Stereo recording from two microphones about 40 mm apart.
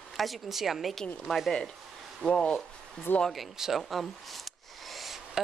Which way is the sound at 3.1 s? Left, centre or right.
Left.